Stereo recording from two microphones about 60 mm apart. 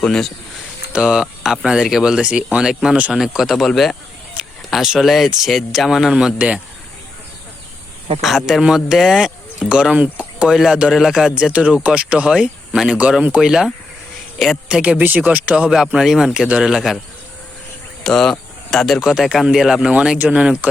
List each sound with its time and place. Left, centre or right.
0.0 s speech: centre
0.9 s speech: centre
4.4 s a sound: centre
4.7 s speech: centre
6.1 s speech: centre
8.2 s speech: centre
9.6 s speech: centre
14.3 s speech: centre
14.7 s speech: centre
15.5 s speech: centre
18.0 s speech: centre
18.9 s speech: centre